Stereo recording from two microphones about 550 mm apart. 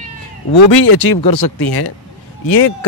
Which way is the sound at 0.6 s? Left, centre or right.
Left.